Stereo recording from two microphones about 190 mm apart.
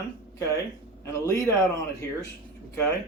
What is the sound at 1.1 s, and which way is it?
Speech, 15° left (ahead or behind).